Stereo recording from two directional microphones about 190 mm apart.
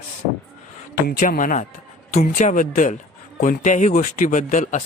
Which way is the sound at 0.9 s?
50° left (ahead or behind).